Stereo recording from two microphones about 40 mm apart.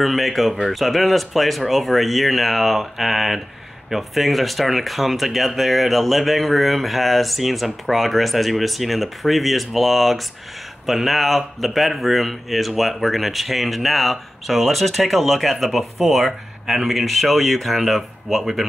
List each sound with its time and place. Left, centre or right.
0.0 s speech: centre